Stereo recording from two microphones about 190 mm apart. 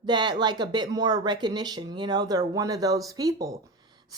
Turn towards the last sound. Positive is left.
turn(degrees=-20)  # may be behind; listen again after turning